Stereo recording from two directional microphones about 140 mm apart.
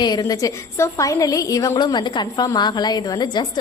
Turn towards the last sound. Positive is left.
turn(degrees=30)  # may be behind; listen again after turning